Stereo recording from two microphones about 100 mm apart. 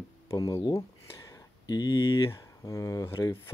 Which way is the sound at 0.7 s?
35° left (ahead or behind).